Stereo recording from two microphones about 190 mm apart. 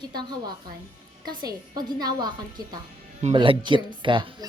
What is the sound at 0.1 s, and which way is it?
A woman's voice, 20° right (ahead or behind).